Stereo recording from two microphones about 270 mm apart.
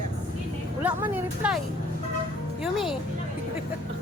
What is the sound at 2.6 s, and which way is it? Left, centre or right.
Speech, centre.